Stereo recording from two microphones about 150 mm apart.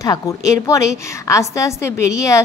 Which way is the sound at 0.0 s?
20° left (ahead or behind).